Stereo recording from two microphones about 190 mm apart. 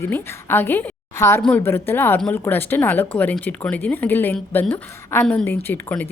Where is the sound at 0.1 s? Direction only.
10° left (ahead or behind).